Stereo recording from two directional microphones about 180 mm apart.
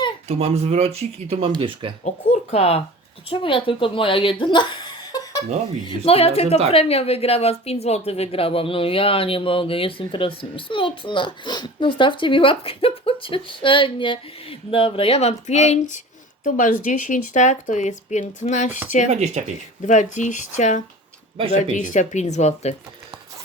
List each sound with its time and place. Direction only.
0.3 s speech: 35° right (ahead or behind)
2.0 s speech: 40° left (ahead or behind)
5.9 s speech: 35° left (ahead or behind)
19.1 s speech: 40° right (ahead or behind)
19.9 s speech: 40° left (ahead or behind)